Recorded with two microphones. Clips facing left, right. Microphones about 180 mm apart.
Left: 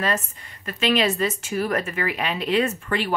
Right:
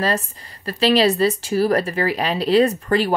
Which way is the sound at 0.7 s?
35° right (ahead or behind).